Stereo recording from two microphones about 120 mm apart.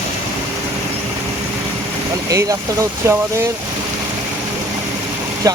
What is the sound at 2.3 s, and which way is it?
Speech, 25° right (ahead or behind).